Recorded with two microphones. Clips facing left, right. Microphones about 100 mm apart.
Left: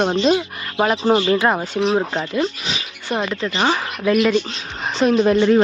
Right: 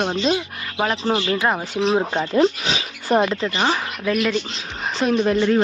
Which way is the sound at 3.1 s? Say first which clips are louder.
Right 5 dB; 35° right (ahead or behind).